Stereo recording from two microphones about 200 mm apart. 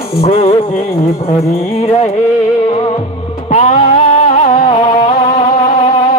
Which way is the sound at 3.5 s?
35° left (ahead or behind).